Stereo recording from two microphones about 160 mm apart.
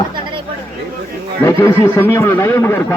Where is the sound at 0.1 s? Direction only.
30° right (ahead or behind).